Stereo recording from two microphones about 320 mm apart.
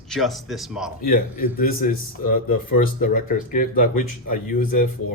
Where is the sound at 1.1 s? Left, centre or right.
Left.